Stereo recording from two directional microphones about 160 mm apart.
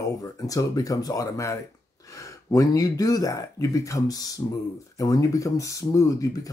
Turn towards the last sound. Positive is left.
turn(degrees=20)  # may be behind; listen again after turning